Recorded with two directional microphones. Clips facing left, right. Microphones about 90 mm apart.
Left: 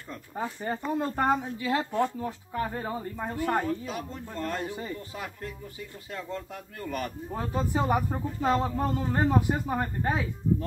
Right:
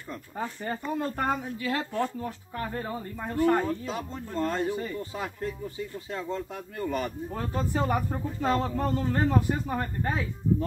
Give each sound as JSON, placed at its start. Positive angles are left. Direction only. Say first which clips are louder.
{"t": 0.9, "sound": "speech", "louder": "left 3 dB", "side_deg": 25}
{"t": 3.6, "sound": "speech", "louder": "right 1 dB", "side_deg": -25}
{"t": 7.3, "sound": "speech", "louder": "left 1 dB", "side_deg": 15}